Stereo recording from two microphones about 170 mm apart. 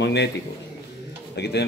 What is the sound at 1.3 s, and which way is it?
Speech, 80° left.